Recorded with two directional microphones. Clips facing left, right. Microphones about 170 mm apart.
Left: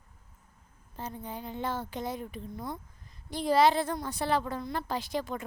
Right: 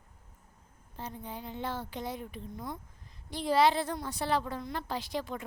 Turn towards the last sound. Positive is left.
turn(degrees=45)  # may be behind; listen again after turning